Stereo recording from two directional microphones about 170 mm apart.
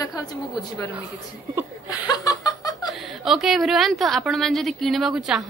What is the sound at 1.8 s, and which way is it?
Chuckle, 20° left (ahead or behind).